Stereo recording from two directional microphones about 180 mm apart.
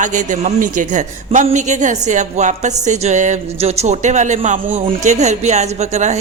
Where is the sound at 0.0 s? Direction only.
45° right (ahead or behind).